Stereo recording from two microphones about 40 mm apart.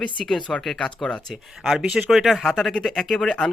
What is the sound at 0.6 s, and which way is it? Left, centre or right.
Speech, centre.